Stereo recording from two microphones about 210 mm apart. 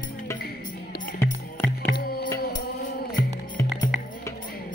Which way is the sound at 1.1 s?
10° left (ahead or behind).